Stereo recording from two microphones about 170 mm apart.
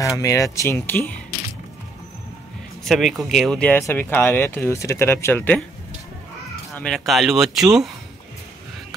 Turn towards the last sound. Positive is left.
turn(degrees=0)  # may be behind; listen again after turning